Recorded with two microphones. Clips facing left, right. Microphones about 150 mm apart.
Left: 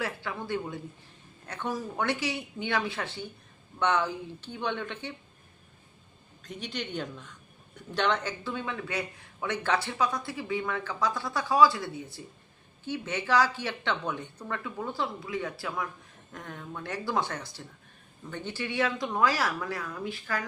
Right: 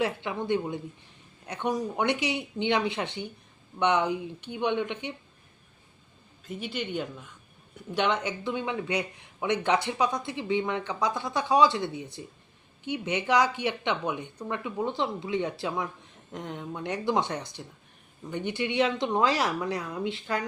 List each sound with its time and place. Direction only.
0.0 s speech: 20° right (ahead or behind)
6.4 s speech: 5° right (ahead or behind); by 20.4 s 25° right (ahead or behind)